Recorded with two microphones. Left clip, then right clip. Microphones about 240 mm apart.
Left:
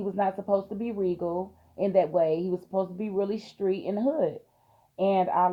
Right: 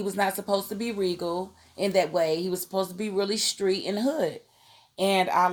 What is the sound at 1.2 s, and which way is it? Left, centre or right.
Speech, right.